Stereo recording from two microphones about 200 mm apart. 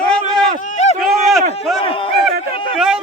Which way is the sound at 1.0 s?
Centre (ahead or behind).